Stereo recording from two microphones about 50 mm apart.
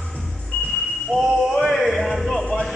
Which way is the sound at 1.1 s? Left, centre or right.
Centre.